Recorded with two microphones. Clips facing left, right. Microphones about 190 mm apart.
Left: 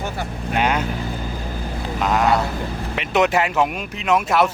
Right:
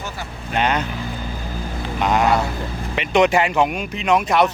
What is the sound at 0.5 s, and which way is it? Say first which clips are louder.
Speech: even; 10° left (ahead or behind).